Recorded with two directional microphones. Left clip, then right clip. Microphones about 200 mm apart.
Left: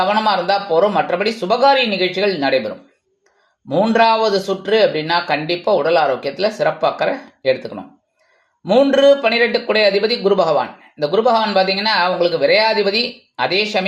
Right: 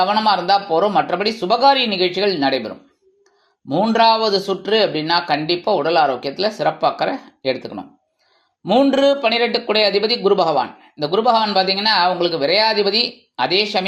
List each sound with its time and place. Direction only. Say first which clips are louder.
0.1 s speech: even; 25° right (ahead or behind)